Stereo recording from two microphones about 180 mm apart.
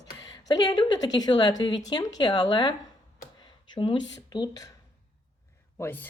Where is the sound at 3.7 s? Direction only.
25° left (ahead or behind).